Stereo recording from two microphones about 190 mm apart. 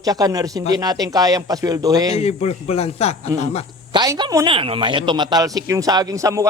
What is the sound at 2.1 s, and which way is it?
Speech, 35° left (ahead or behind).